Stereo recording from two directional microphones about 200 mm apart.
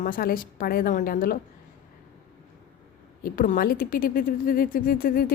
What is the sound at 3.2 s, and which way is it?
A woman's voice, 40° left (ahead or behind).